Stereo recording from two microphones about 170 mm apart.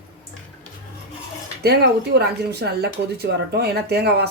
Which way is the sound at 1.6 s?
70° right (ahead or behind).